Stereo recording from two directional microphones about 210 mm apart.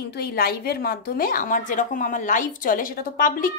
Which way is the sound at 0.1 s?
45° left (ahead or behind).